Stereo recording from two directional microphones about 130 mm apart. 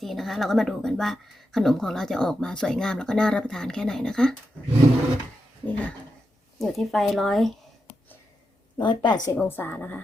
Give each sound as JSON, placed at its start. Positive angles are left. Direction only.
{"t": 0.0, "sound": "speech", "side_deg": 0}
{"t": 5.6, "sound": "a woman's voice", "side_deg": 10}
{"t": 8.8, "sound": "a woman's voice", "side_deg": 35}
{"t": 9.3, "sound": "a woman's voice", "side_deg": 15}